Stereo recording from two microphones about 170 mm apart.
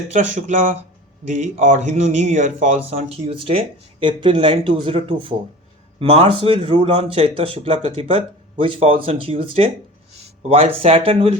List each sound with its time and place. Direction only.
0.1 s speech: 45° right (ahead or behind)